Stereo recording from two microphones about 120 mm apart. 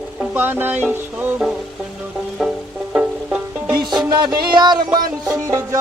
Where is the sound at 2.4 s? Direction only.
5° right (ahead or behind).